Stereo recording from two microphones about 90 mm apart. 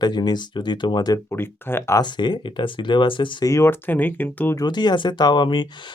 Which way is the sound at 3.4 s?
30° left (ahead or behind).